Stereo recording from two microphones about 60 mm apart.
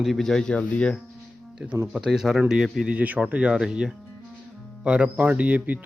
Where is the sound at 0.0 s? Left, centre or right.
Centre.